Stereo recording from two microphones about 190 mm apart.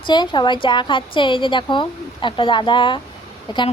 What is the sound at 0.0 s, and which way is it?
Child singing, 25° left (ahead or behind).